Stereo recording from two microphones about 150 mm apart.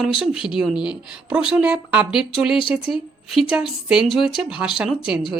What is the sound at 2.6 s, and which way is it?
Speech, 35° left (ahead or behind).